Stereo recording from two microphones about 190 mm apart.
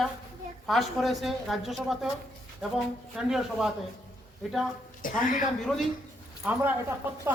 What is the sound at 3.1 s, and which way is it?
Speech, centre (ahead or behind).